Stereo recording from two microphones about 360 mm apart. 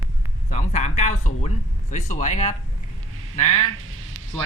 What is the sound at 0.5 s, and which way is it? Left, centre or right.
Speech, centre.